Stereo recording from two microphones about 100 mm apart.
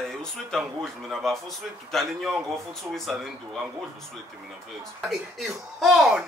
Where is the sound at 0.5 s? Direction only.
Centre (ahead or behind).